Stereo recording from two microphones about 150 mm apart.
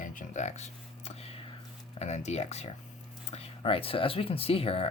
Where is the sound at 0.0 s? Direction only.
60° left (ahead or behind); by 1.4 s 45° left (ahead or behind).